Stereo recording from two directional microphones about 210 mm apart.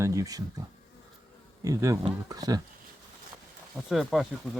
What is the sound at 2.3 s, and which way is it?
Speech, 15° right (ahead or behind).